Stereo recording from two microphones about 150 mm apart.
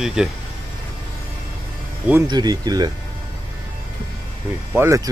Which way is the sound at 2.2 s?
25° right (ahead or behind).